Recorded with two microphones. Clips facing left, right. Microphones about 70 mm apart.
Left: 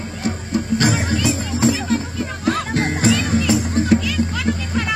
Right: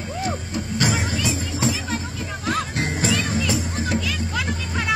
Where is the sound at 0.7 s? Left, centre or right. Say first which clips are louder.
Left 3 dB; left.